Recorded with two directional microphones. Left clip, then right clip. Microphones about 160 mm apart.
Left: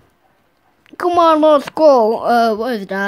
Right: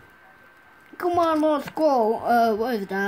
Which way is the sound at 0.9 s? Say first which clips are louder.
Left 10 dB; 65° left (ahead or behind).